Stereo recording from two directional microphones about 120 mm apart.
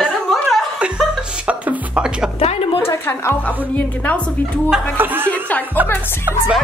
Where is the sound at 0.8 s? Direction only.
10° right (ahead or behind).